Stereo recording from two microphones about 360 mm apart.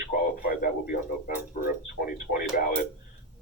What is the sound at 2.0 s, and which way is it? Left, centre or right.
Radio, left.